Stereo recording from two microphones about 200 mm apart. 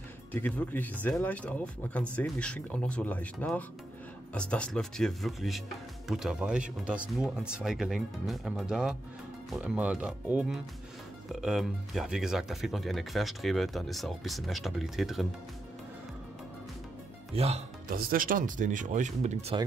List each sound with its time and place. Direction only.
0.3 s speech: 10° left (ahead or behind)
17.3 s speech: 30° right (ahead or behind)
17.9 s speech: 45° right (ahead or behind)